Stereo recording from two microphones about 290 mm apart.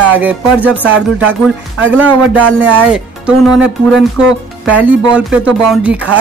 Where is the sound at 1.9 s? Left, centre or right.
Centre.